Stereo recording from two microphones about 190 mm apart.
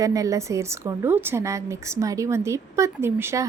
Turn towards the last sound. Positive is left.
turn(degrees=-15)  # may be behind; listen again after turning